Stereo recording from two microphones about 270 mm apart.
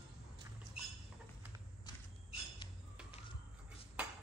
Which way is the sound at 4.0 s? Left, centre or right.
Centre.